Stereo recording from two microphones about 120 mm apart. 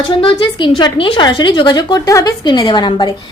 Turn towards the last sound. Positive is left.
turn(degrees=40)  # may be behind; listen again after turning